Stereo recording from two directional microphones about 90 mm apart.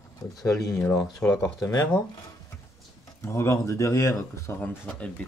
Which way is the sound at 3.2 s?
30° left (ahead or behind).